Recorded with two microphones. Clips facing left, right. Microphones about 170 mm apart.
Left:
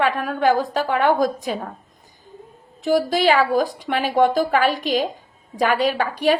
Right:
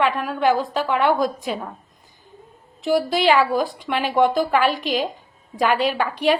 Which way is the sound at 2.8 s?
45° left (ahead or behind).